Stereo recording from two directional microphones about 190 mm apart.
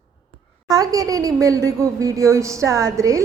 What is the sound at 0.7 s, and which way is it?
A woman's voice, 20° right (ahead or behind).